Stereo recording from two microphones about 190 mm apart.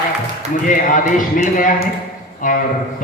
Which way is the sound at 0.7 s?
45° left (ahead or behind).